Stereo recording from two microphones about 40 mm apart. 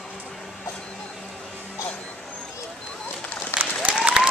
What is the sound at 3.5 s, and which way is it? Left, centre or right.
Applause, left.